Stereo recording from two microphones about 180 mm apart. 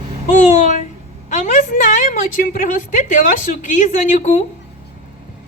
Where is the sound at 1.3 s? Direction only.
45° left (ahead or behind).